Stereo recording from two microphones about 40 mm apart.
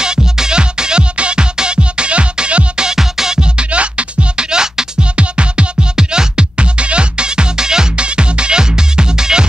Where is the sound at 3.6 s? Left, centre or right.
Right.